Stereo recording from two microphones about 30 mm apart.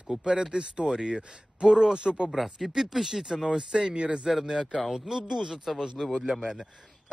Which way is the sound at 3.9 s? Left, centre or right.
Right.